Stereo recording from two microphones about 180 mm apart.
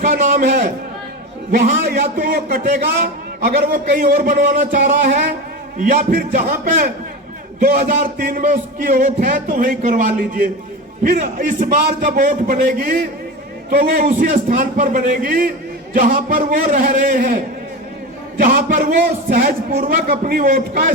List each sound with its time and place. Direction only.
0.0 s a man's voice: 50° right (ahead or behind)
4.2 s music: 45° right (ahead or behind)